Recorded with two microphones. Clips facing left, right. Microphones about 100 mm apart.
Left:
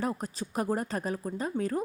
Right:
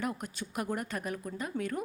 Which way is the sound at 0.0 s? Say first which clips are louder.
Left 4 dB; 35° left (ahead or behind).